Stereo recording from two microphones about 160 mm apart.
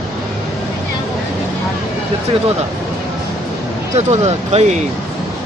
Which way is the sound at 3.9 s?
45° right (ahead or behind).